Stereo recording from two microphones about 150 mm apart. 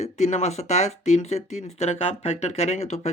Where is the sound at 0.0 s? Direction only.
50° left (ahead or behind).